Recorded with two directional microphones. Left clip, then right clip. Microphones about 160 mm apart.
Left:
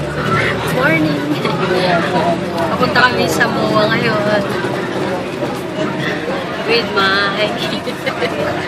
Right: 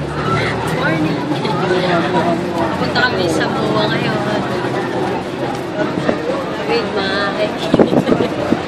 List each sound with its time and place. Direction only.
2.9 s speech: 10° left (ahead or behind)
6.7 s speech: 15° left (ahead or behind)